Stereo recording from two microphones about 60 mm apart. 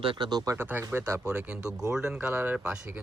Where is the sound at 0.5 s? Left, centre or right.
Right.